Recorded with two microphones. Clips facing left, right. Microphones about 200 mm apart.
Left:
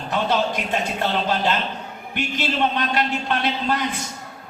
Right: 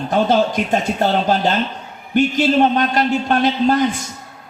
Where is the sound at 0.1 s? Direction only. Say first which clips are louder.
Right 6 dB; 45° right (ahead or behind).